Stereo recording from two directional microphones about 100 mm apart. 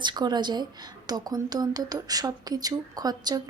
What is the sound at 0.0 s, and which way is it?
A woman's voice, 45° right (ahead or behind).